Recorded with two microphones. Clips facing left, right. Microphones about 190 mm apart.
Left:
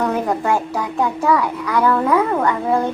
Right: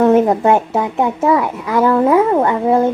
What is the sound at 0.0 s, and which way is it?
A child's voice, 25° right (ahead or behind).